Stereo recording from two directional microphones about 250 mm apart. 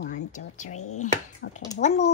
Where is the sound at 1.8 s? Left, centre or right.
Left.